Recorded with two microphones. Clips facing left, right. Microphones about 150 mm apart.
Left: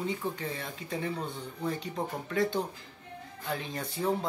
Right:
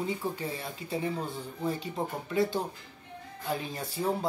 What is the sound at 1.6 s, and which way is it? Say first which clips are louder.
Speech: right 1 dB; 5° right (ahead or behind).